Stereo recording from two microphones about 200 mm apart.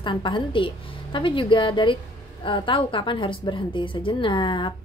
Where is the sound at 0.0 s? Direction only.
25° left (ahead or behind).